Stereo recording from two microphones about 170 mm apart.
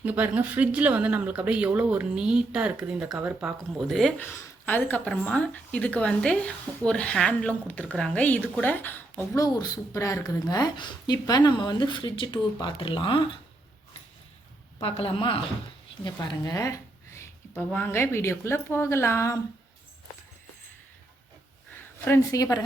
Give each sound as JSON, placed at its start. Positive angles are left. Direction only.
{"t": 0.0, "sound": "speech", "side_deg": -10}
{"t": 14.8, "sound": "a woman's voice", "side_deg": 35}
{"t": 22.0, "sound": "speech", "side_deg": 15}